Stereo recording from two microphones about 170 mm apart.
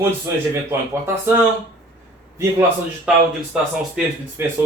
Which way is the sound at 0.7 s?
15° right (ahead or behind).